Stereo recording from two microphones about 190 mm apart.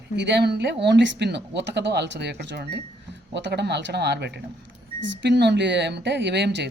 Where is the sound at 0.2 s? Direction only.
65° right (ahead or behind).